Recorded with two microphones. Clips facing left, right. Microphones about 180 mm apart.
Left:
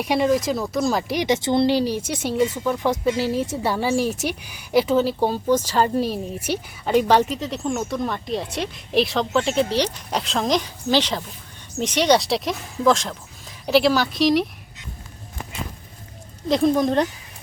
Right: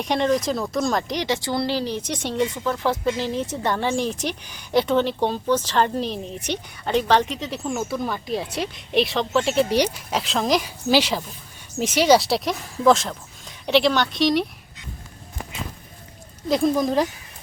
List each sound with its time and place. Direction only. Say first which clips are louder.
0.0 s a woman's voice: left 1 dB; 5° left (ahead or behind); by 10.0 s 10° right (ahead or behind)
10.1 s a woman's voice: even; centre (ahead or behind)
16.5 s a woman's voice: left 2 dB; centre (ahead or behind)